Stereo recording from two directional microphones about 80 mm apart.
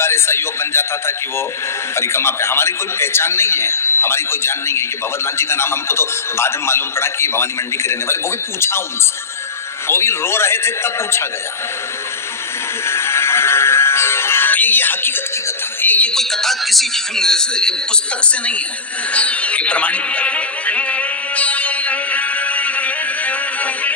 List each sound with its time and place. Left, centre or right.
0.0 s a man's voice: left
9.8 s a man's voice: left
12.8 s music: left
16.1 s a woman's voice: centre
19.1 s music: centre